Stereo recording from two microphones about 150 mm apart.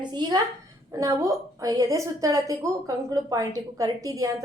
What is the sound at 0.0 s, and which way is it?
A woman's voice, 30° right (ahead or behind).